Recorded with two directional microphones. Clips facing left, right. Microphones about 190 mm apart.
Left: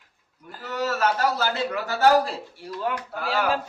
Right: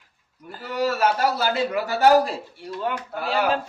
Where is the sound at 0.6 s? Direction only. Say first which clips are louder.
Right 3 dB; 10° right (ahead or behind).